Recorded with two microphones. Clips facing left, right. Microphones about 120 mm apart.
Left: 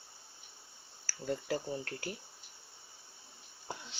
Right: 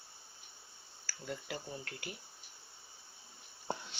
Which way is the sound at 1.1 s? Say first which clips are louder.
Left 7 dB; 40° left (ahead or behind).